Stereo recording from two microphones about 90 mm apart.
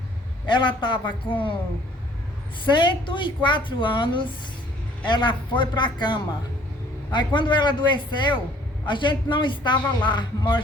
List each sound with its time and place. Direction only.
0.5 s a woman's voice: 65° left (ahead or behind)
2.7 s a woman's voice: 60° left (ahead or behind)